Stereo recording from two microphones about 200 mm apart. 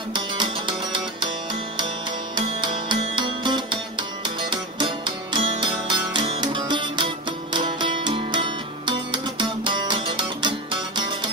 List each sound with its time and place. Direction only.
0.1 s music: 25° right (ahead or behind)
2.3 s music: 25° right (ahead or behind)